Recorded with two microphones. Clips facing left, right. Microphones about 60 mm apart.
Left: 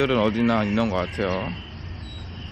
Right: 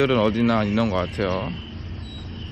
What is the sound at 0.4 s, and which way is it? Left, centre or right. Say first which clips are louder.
Speech: right 1 dB; right.